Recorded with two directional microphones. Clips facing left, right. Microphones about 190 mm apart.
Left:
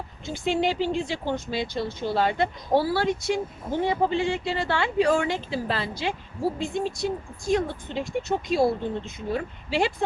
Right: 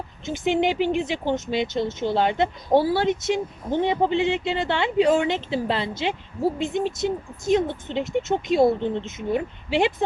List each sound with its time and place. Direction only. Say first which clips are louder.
0.3 s speech: right 3 dB; 20° right (ahead or behind)